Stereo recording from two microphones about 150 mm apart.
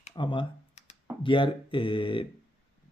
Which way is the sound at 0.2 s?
35° left (ahead or behind).